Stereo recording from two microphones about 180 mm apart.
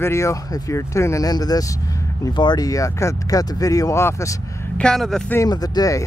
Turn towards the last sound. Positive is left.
turn(degrees=20)  # may be behind; listen again after turning